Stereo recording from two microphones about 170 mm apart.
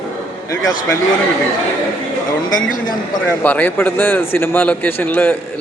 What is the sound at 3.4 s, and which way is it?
Speech, 10° left (ahead or behind).